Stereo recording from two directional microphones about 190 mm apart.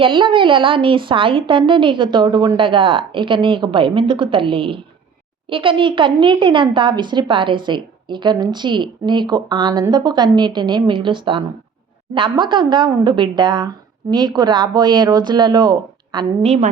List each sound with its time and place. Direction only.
0.0 s a woman's voice: 25° right (ahead or behind)